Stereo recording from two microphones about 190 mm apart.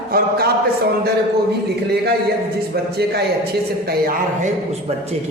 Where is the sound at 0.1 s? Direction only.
55° right (ahead or behind).